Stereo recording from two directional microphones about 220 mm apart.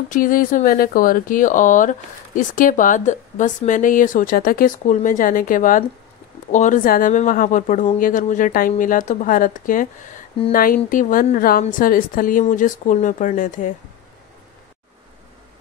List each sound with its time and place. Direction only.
0.1 s speech: 40° left (ahead or behind)